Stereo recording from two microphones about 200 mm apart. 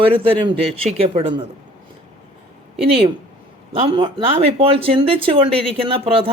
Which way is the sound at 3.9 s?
25° right (ahead or behind).